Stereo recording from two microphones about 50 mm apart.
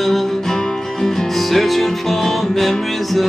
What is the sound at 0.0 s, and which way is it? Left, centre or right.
Music, centre.